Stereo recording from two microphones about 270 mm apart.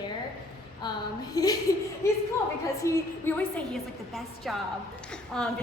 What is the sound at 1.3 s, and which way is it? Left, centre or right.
Speech, centre.